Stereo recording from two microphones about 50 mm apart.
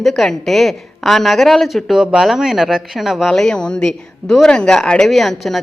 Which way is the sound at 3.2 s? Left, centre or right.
Centre.